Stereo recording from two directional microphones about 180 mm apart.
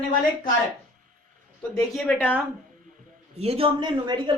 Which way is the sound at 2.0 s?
5° left (ahead or behind).